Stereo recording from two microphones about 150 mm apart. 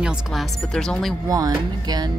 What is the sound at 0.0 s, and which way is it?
Speech, centre (ahead or behind).